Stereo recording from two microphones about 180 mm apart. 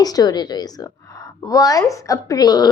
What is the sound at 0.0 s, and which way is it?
A woman's voice, 20° left (ahead or behind).